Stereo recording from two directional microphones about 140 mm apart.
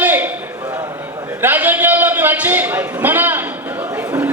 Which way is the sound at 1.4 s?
15° right (ahead or behind).